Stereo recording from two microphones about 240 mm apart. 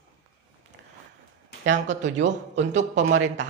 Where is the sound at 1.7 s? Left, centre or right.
Right.